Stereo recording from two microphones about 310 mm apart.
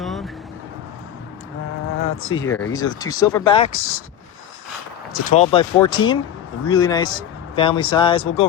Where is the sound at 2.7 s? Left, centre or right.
Centre.